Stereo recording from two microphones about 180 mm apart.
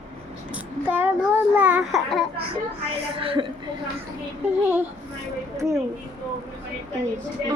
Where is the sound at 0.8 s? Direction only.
10° right (ahead or behind).